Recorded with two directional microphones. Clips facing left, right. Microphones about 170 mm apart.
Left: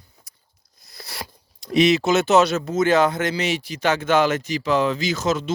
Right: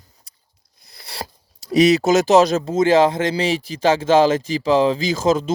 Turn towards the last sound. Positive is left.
turn(degrees=-35)  # may be behind; listen again after turning